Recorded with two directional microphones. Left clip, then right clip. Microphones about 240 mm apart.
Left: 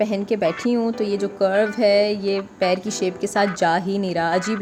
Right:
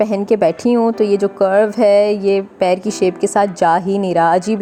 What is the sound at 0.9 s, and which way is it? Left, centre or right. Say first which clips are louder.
Speech: right 8 dB; centre.